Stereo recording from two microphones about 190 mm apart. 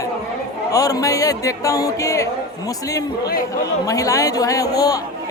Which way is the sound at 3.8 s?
20° left (ahead or behind).